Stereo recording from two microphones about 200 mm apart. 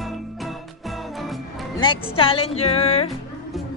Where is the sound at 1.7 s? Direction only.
25° left (ahead or behind).